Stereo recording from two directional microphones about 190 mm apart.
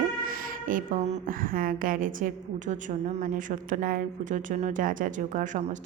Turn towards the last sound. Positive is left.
turn(degrees=-40)  # may be behind; listen again after turning